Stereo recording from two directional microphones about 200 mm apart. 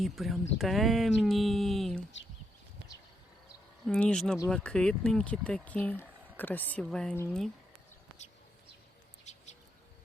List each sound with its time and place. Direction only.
0.0 s speech: centre (ahead or behind)
3.8 s speech: 5° left (ahead or behind)
9.3 s bird: 35° left (ahead or behind)